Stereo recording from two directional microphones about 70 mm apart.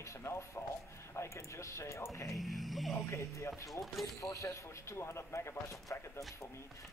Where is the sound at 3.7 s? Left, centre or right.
Centre.